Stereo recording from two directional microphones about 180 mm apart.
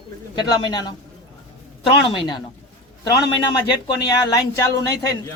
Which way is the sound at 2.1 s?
25° left (ahead or behind).